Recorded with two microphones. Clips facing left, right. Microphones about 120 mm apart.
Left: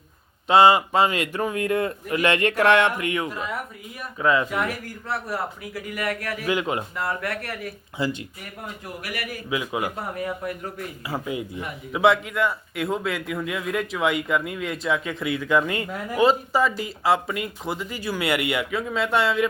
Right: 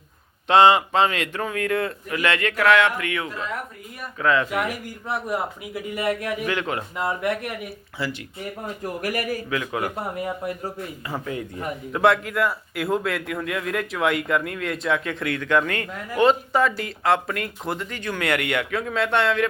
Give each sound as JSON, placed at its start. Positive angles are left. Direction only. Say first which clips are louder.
{"t": 0.4, "sound": "a man's voice", "louder": "even", "side_deg": 5}
{"t": 4.5, "sound": "speech", "louder": "right 1 dB", "side_deg": -15}
{"t": 6.4, "sound": "a man's voice", "louder": "left 1 dB", "side_deg": 15}
{"t": 6.9, "sound": "speech", "louder": "right 3 dB", "side_deg": -20}
{"t": 8.8, "sound": "a man's voice", "louder": "right 8 dB", "side_deg": -45}
{"t": 9.5, "sound": "a man's voice", "louder": "even", "side_deg": 15}
{"t": 9.9, "sound": "speech", "louder": "right 1 dB", "side_deg": -20}
{"t": 11.1, "sound": "a man's voice", "louder": "left 2 dB", "side_deg": 10}